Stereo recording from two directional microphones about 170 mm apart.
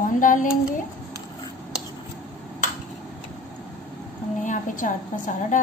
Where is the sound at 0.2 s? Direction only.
50° left (ahead or behind).